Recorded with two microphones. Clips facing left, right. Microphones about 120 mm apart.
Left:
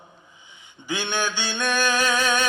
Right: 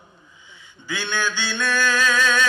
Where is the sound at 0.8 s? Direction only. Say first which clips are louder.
Even; 20° left (ahead or behind).